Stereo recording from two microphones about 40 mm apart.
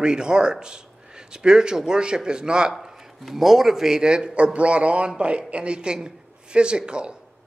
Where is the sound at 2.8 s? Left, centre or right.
Centre.